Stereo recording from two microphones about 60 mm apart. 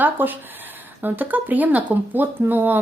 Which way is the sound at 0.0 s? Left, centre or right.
Right.